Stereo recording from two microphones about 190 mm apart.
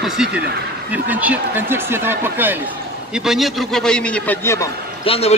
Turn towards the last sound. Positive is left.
turn(degrees=30)  # may be behind; listen again after turning